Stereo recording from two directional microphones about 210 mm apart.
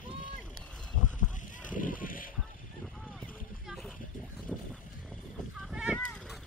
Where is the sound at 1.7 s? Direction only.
40° left (ahead or behind).